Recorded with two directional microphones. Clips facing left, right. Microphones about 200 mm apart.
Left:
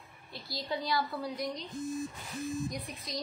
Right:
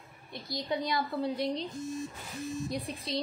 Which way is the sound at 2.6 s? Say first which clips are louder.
Right 3 dB; 30° right (ahead or behind).